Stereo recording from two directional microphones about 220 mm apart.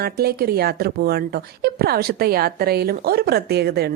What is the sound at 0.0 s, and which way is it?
Speech, 45° right (ahead or behind).